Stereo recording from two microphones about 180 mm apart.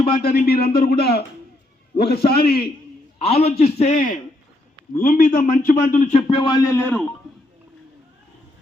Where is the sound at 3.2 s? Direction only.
35° left (ahead or behind); by 7.0 s 10° left (ahead or behind).